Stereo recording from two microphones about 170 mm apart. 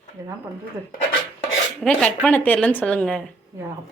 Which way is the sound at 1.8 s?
5° left (ahead or behind).